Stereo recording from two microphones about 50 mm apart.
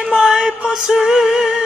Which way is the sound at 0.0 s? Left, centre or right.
Centre.